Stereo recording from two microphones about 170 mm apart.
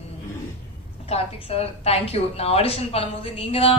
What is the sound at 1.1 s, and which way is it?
A woman's voice, 35° left (ahead or behind).